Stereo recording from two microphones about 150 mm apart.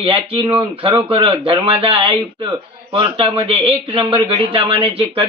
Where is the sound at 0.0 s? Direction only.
40° right (ahead or behind).